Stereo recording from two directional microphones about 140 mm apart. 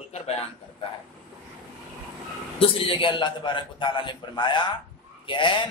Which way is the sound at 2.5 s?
40° left (ahead or behind).